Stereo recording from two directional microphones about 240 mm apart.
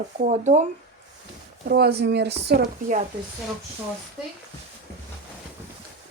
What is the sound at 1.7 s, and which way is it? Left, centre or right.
A woman's voice, right.